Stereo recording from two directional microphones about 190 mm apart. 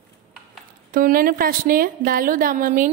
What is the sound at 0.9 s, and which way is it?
Speech, 50° right (ahead or behind).